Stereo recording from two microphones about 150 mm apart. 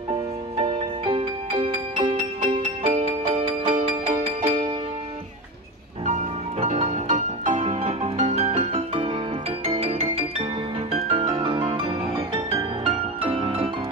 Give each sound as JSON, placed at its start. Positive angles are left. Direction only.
{"t": 0.6, "sound": "music", "side_deg": -40}
{"t": 6.0, "sound": "music", "side_deg": -50}